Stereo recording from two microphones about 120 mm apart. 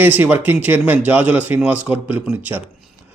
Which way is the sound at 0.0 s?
15° right (ahead or behind).